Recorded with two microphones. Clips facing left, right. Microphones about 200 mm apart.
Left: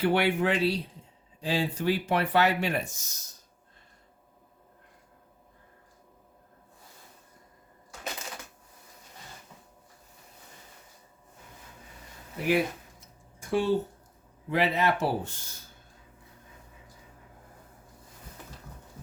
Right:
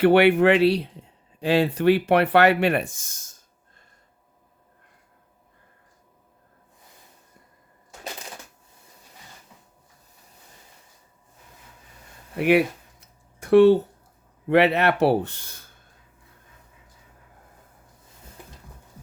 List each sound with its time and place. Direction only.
0.0 s speech: 65° right (ahead or behind); by 3.4 s 50° right (ahead or behind)
12.4 s speech: 70° right (ahead or behind)